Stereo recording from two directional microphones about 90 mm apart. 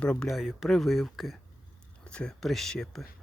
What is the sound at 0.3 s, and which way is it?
Speech, 5° right (ahead or behind).